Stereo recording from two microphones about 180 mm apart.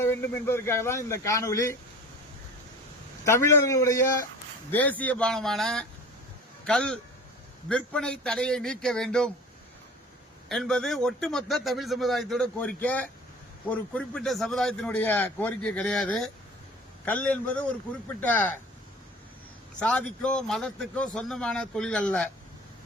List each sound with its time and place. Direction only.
0.0 s speech: 15° left (ahead or behind)
3.2 s a man's voice: 15° left (ahead or behind)
10.5 s a man's voice: 5° left (ahead or behind)
19.8 s a man's voice: 5° left (ahead or behind)